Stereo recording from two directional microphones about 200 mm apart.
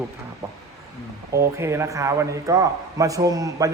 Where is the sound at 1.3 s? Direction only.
15° right (ahead or behind).